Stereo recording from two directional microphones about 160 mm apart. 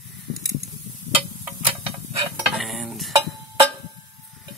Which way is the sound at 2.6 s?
Centre (ahead or behind).